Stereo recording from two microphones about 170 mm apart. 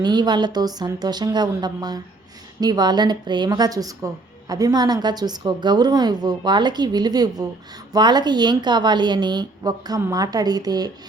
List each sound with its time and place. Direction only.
0.0 s a woman's voice: 25° right (ahead or behind)